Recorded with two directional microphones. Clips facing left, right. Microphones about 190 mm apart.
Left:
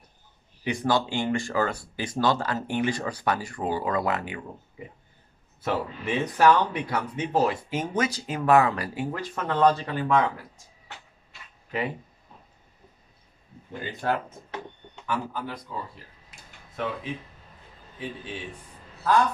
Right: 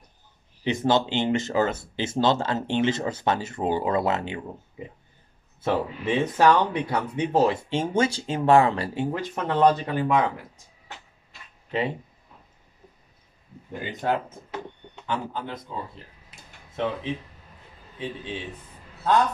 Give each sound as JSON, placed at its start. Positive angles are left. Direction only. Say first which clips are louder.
{"t": 0.7, "sound": "speech", "louder": "right 3 dB", "side_deg": -20}
{"t": 5.6, "sound": "speech", "louder": "right 3 dB", "side_deg": -20}
{"t": 13.7, "sound": "speech", "louder": "right 2 dB", "side_deg": -20}